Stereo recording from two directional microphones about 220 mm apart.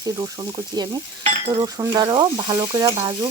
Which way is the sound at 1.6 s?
15° right (ahead or behind).